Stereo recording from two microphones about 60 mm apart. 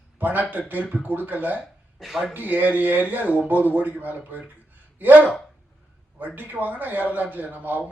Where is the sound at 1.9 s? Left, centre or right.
Centre.